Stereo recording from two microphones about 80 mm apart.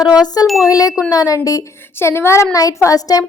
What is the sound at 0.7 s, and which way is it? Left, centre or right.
Speech, left.